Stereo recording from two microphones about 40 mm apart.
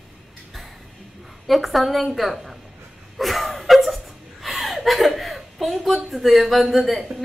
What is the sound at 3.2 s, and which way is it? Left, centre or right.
Chuckle, centre.